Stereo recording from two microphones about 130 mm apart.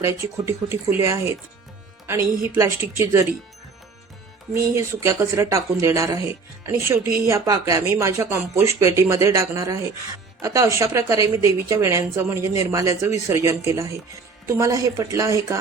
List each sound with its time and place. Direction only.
0.0 s a woman's voice: 20° right (ahead or behind)
4.5 s a woman's voice: 20° right (ahead or behind)